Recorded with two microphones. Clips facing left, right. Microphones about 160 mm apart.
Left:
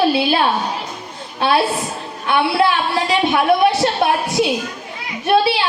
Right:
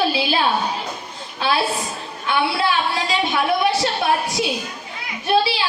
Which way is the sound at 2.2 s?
60° left (ahead or behind).